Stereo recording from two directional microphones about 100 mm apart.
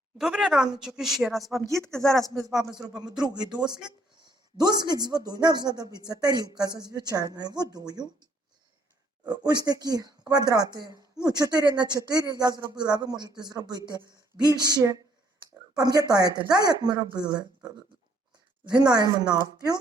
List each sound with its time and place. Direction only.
0.2 s a woman's voice: 5° right (ahead or behind)
3.2 s a man's voice: 45° right (ahead or behind)
9.2 s a man's voice: 45° right (ahead or behind)
18.7 s speech: 40° right (ahead or behind)